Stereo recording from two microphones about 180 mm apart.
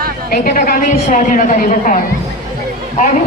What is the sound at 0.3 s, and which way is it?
A woman's voice, 50° left (ahead or behind).